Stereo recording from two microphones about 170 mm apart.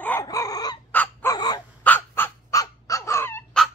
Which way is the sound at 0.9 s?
10° left (ahead or behind).